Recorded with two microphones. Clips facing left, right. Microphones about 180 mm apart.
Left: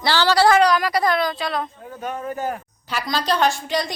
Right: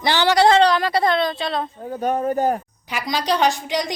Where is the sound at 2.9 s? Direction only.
15° right (ahead or behind).